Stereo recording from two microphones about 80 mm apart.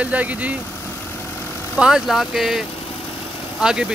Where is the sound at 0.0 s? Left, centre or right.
Centre.